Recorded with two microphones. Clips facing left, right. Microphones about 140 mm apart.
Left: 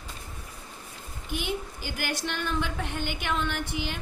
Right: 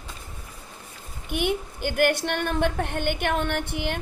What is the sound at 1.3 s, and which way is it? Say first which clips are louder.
A woman's voice: right 6 dB; 60° right (ahead or behind).